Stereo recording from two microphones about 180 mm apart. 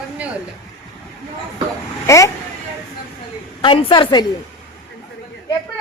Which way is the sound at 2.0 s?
15° left (ahead or behind).